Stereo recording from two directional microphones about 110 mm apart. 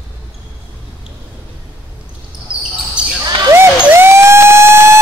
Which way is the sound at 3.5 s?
25° right (ahead or behind).